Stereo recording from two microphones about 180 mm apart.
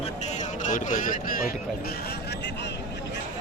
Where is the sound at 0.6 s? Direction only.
45° left (ahead or behind).